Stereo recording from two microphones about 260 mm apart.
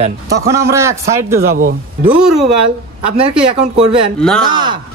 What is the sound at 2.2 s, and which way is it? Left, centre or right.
Speech, centre.